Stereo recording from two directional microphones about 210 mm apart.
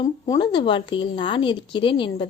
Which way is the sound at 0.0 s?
20° left (ahead or behind).